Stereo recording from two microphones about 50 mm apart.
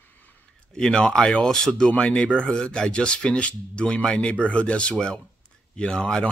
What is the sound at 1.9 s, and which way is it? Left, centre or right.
Speech, left.